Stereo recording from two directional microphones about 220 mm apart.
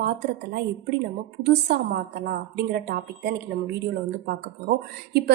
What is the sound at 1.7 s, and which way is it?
Speech, 50° right (ahead or behind).